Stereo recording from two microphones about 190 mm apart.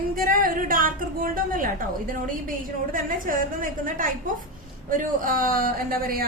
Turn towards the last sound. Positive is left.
turn(degrees=-50)  # may be behind; listen again after turning